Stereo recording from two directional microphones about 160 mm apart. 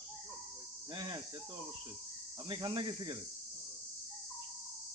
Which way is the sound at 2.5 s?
30° right (ahead or behind).